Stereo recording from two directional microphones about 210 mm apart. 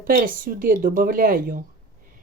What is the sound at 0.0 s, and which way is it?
Speech, 40° right (ahead or behind).